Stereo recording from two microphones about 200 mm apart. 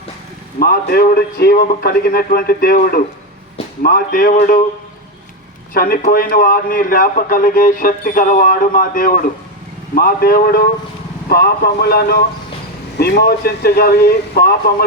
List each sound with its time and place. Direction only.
0.6 s a man's voice: 50° left (ahead or behind)
5.7 s a man's voice: 45° left (ahead or behind)